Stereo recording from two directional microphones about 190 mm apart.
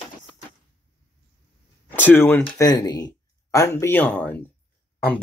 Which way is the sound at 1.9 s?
10° left (ahead or behind).